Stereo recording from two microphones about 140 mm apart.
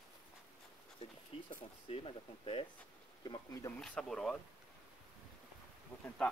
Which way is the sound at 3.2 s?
25° left (ahead or behind).